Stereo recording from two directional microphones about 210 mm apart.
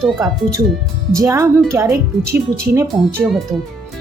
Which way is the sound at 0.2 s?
15° right (ahead or behind).